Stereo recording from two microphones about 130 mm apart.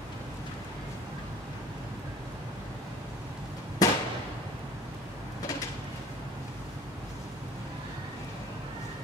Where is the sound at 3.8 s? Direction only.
25° left (ahead or behind).